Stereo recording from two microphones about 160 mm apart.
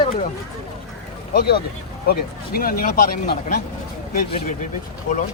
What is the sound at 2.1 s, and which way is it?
Speech, 65° left (ahead or behind).